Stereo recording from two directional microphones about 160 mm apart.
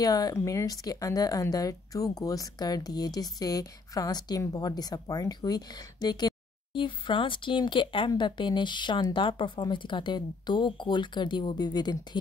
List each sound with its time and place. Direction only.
0.0 s speech: 25° left (ahead or behind)